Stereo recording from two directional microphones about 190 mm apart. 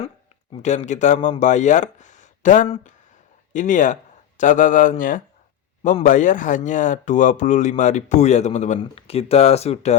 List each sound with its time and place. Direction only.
0.6 s speech: 35° left (ahead or behind)